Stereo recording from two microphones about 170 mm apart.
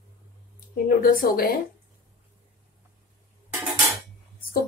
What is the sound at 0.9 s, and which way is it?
Speech, 60° left (ahead or behind).